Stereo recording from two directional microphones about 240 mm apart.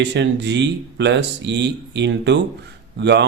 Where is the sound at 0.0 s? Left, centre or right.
Right.